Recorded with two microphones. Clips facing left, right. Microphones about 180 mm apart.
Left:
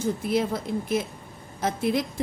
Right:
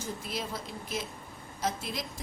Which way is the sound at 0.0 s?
55° left (ahead or behind).